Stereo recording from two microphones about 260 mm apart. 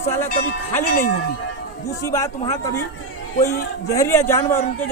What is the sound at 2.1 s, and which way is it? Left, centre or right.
A man's voice, centre.